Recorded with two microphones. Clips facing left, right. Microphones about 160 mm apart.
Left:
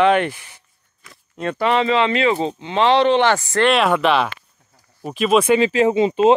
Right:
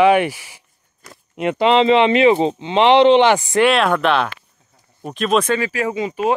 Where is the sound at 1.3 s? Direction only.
20° right (ahead or behind).